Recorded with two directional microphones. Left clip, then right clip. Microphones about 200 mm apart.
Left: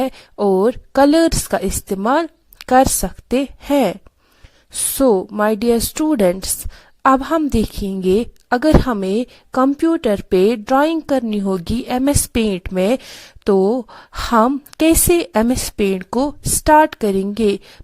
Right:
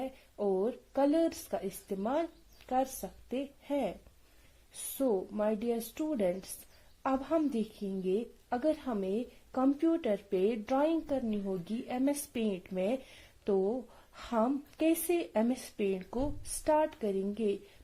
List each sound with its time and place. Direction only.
0.0 s a woman's voice: 50° left (ahead or behind)
4.9 s a woman's voice: 45° left (ahead or behind)